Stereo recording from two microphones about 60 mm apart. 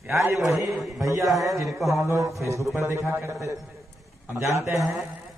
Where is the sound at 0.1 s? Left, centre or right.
Right.